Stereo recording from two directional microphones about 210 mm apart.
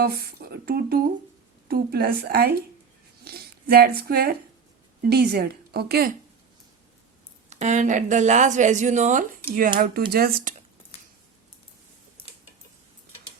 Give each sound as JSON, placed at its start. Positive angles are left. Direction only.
{"t": 0.0, "sound": "a woman's voice", "side_deg": -45}
{"t": 7.5, "sound": "a woman's voice", "side_deg": -35}